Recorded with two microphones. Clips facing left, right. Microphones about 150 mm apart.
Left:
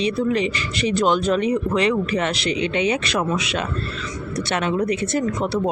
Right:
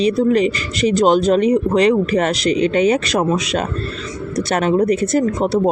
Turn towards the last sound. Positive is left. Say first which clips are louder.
# right 6 dB
turn(degrees=-40)  # may be behind; listen again after turning